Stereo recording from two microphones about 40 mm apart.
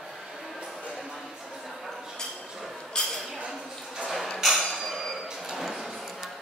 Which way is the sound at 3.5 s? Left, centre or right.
Centre.